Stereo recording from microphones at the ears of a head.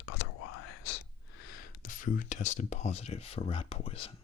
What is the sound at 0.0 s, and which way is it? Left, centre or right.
Whispering, left.